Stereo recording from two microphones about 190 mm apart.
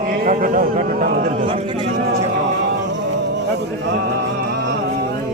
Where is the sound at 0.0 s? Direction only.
45° right (ahead or behind).